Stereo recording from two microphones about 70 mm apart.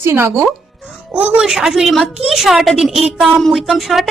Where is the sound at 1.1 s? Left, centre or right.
Right.